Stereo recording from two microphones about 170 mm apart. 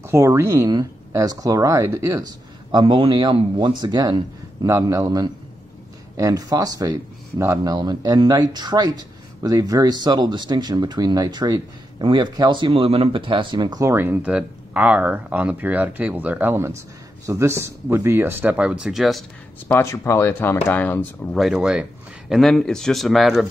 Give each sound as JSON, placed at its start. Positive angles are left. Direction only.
{"t": 0.0, "sound": "speech", "side_deg": -15}
{"t": 2.7, "sound": "speech", "side_deg": -30}
{"t": 19.7, "sound": "speech", "side_deg": 15}
{"t": 21.4, "sound": "speech", "side_deg": -5}